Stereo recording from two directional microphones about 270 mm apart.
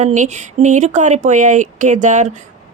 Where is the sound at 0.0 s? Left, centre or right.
Right.